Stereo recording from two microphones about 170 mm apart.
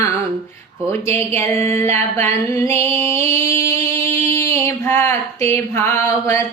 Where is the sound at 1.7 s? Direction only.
15° left (ahead or behind).